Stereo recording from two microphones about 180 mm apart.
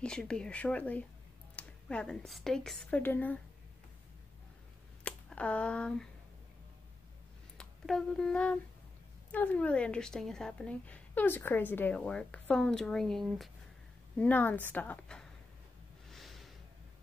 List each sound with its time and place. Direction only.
0.0 s a woman's voice: 5° left (ahead or behind)
5.0 s speech: 5° left (ahead or behind)
7.5 s a woman's voice: centre (ahead or behind)
16.1 s a sound: centre (ahead or behind)